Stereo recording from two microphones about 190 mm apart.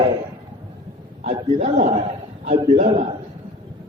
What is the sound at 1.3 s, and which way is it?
A man's voice, 35° right (ahead or behind).